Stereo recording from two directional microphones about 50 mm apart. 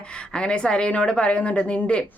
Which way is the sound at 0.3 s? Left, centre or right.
Centre.